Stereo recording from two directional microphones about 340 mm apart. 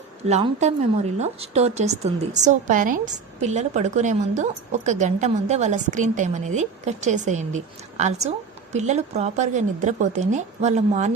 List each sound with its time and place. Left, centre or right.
0.3 s a woman's voice: centre